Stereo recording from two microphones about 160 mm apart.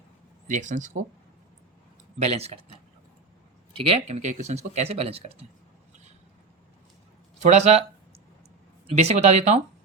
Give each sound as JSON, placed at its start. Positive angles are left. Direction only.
{"t": 0.4, "sound": "speech", "side_deg": -50}
{"t": 2.1, "sound": "speech", "side_deg": -40}
{"t": 3.7, "sound": "speech", "side_deg": -35}
{"t": 7.4, "sound": "speech", "side_deg": -45}